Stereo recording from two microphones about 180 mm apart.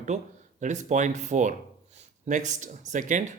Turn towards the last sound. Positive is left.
turn(degrees=-45)  # may be behind; listen again after turning